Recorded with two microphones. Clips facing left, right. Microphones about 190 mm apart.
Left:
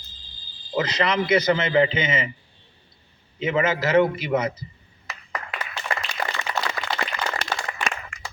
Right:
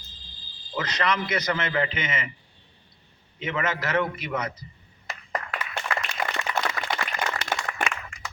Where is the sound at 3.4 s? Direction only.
25° left (ahead or behind).